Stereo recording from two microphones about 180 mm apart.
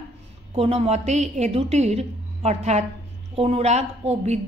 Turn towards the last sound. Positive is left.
turn(degrees=-35)  # may be behind; listen again after turning